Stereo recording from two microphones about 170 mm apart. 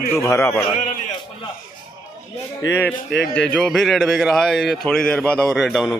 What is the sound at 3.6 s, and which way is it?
A man's voice, centre (ahead or behind).